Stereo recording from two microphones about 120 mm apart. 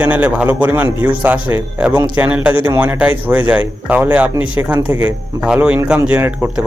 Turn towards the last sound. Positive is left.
turn(degrees=-5)  # may be behind; listen again after turning